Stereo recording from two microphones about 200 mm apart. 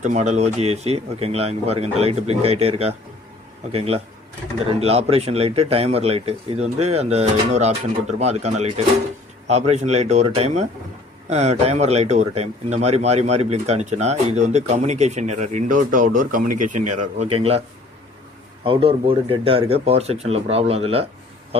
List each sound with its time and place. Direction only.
0.0 s speech: 35° right (ahead or behind)
18.6 s speech: 25° right (ahead or behind)